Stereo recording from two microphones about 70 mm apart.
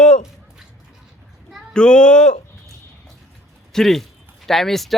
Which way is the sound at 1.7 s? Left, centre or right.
Centre.